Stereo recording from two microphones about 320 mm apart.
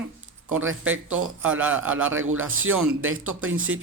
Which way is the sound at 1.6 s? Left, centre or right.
Centre.